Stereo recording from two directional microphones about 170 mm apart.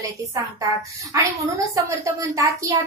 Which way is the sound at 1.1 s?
15° right (ahead or behind).